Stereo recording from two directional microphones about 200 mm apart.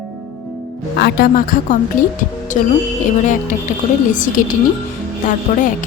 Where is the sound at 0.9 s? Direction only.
50° left (ahead or behind).